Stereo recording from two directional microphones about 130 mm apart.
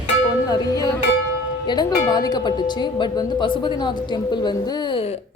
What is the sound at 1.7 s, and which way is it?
Speech, 30° left (ahead or behind).